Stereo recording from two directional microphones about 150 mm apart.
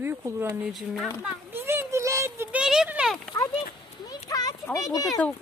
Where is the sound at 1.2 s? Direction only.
15° right (ahead or behind).